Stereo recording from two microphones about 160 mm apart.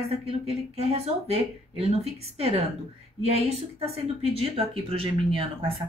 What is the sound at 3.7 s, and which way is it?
Speech, 40° right (ahead or behind).